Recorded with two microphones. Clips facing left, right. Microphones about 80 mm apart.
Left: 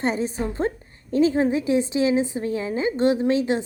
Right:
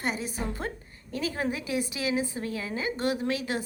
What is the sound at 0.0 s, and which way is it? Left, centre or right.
A woman's voice, left.